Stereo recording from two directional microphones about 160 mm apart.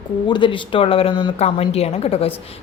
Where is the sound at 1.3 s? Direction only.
40° left (ahead or behind).